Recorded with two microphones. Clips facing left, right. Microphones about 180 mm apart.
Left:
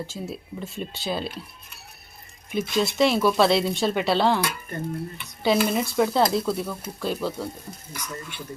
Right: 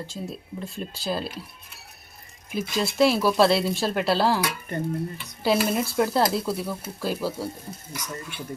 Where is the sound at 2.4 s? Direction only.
Centre (ahead or behind).